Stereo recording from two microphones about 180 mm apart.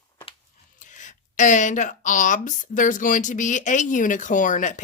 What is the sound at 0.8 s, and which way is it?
Speech, 45° left (ahead or behind).